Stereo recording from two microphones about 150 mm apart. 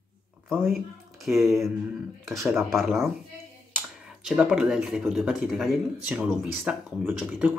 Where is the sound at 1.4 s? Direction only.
20° right (ahead or behind).